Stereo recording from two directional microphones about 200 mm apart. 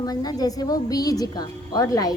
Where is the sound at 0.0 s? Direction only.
20° left (ahead or behind).